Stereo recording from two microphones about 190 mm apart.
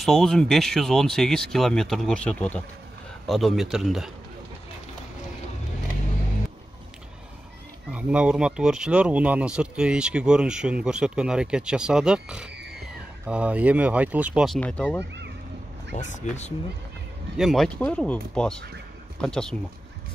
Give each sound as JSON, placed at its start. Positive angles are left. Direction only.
{"t": 0.0, "sound": "speech", "side_deg": 0}
{"t": 7.9, "sound": "speech", "side_deg": -5}
{"t": 15.9, "sound": "speech", "side_deg": 40}
{"t": 17.4, "sound": "speech", "side_deg": 0}